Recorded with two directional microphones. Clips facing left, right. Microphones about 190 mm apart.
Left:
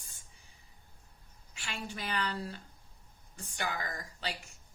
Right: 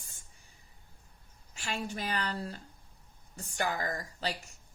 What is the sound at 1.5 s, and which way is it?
A woman's voice, 40° right (ahead or behind).